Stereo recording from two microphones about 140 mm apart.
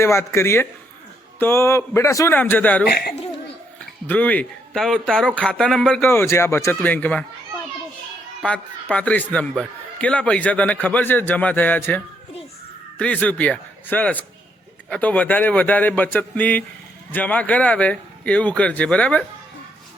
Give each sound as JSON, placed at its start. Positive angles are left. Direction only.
{"t": 0.0, "sound": "a man's voice", "side_deg": 20}
{"t": 4.0, "sound": "a man's voice", "side_deg": 10}
{"t": 6.1, "sound": "a man's voice", "side_deg": 20}
{"t": 8.4, "sound": "a man's voice", "side_deg": 10}